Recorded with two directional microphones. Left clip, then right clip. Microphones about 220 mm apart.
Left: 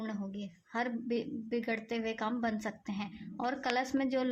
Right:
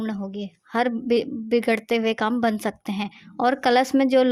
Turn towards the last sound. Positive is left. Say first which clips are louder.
# right 14 dB
turn(degrees=-45)  # may be behind; listen again after turning